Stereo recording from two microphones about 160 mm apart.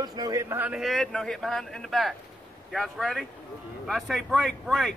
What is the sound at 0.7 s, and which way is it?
Speech, centre (ahead or behind).